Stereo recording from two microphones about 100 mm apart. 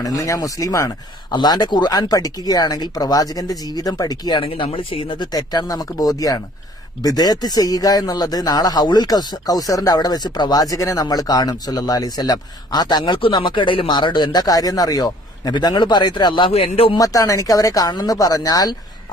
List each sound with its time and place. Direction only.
0.0 s speech: 35° left (ahead or behind)
1.3 s speech: 45° left (ahead or behind)
4.4 s speech: 65° left (ahead or behind)
5.3 s speech: 40° left (ahead or behind); by 16.9 s 75° left (ahead or behind)
16.9 s speech: 35° left (ahead or behind)